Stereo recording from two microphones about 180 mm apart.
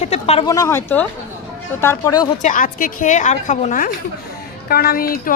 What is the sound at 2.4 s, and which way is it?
Speech, 50° left (ahead or behind).